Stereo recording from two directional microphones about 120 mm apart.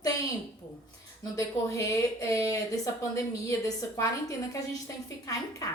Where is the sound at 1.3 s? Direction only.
25° left (ahead or behind).